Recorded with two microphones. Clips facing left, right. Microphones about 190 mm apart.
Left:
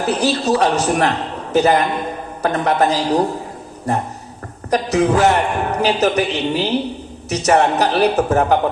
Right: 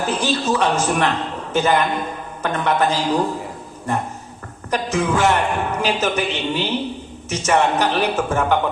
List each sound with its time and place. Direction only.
0.1 s a man's voice: 35° left (ahead or behind)
4.7 s a man's voice: 35° left (ahead or behind)